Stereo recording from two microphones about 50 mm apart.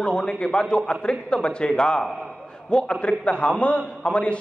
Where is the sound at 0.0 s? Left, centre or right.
Centre.